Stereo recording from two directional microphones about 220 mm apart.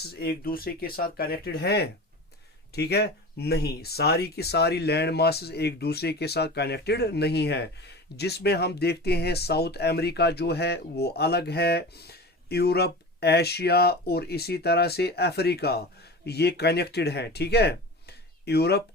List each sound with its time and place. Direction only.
0.1 s speech: 45° left (ahead or behind)